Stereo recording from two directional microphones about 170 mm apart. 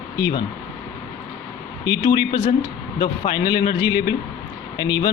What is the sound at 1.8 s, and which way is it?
A man's voice, 25° left (ahead or behind).